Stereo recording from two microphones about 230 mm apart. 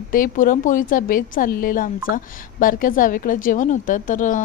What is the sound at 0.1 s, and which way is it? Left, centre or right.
A woman's voice, left.